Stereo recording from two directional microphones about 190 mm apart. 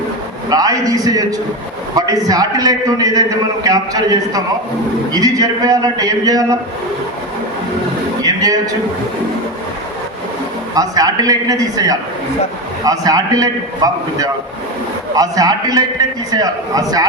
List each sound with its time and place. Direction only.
0.5 s a man's voice: 20° right (ahead or behind)
8.2 s a sound: 20° right (ahead or behind)
10.8 s a man's voice: 20° right (ahead or behind)